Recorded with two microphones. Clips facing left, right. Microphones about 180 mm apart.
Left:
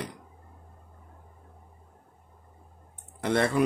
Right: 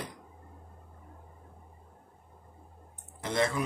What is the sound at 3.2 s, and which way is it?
Speech, 65° left (ahead or behind).